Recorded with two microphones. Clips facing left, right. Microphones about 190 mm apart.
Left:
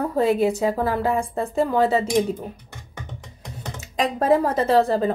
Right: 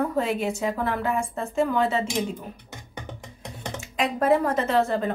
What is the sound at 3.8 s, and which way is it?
A woman's voice, 35° left (ahead or behind).